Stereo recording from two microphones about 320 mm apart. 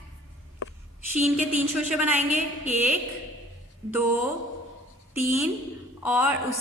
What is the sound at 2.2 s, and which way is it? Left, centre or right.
Speech, right.